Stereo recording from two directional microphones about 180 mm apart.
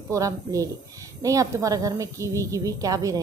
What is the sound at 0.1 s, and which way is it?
A woman's voice, 20° right (ahead or behind).